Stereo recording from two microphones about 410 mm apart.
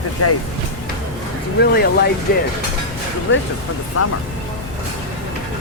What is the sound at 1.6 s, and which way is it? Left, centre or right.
Speech, left.